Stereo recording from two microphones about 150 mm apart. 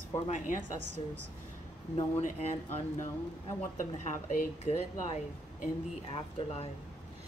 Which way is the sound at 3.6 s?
55° left (ahead or behind).